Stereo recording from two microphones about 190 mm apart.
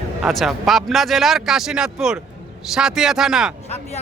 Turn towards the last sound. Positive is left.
turn(degrees=0)  # may be behind; listen again after turning